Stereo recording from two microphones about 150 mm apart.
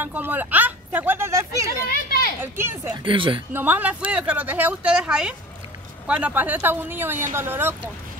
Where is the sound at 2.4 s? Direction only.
15° right (ahead or behind).